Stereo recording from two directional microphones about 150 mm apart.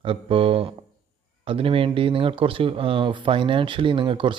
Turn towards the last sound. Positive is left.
turn(degrees=-35)  # may be behind; listen again after turning